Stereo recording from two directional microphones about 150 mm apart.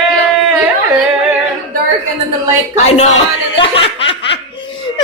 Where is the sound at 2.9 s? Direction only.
50° left (ahead or behind).